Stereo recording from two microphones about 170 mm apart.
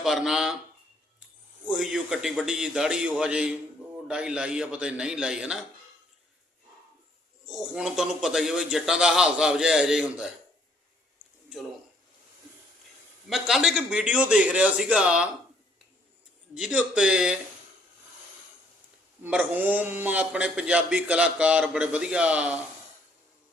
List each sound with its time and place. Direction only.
0.0 s a man's voice: centre (ahead or behind)
7.4 s a man's voice: 5° right (ahead or behind)
13.3 s a man's voice: centre (ahead or behind)
16.6 s a man's voice: 5° right (ahead or behind)
19.2 s a man's voice: 10° right (ahead or behind)